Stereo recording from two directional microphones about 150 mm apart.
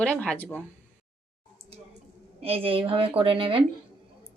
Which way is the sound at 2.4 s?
40° right (ahead or behind).